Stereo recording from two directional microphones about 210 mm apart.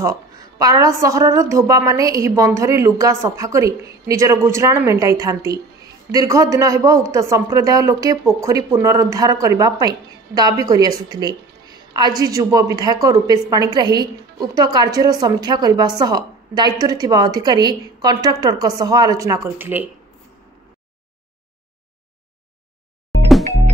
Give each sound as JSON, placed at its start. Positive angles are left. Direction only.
{"t": 0.0, "sound": "a woman's voice", "side_deg": -15}